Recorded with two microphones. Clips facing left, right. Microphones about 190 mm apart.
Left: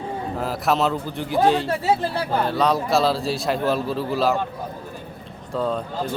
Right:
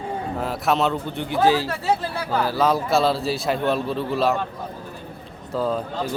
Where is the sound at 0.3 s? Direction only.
Centre (ahead or behind).